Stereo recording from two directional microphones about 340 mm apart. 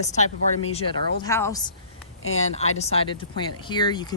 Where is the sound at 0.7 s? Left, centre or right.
Centre.